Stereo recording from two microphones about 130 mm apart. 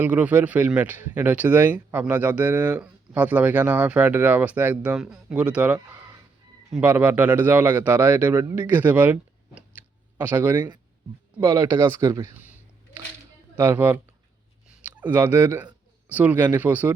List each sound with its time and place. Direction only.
0.0 s speech: 10° right (ahead or behind)
9.6 s clicking: 15° right (ahead or behind)
11.3 s speech: 20° right (ahead or behind)
13.6 s speech: 15° right (ahead or behind)
14.8 s a sound: 10° right (ahead or behind)
15.1 s speech: 15° right (ahead or behind)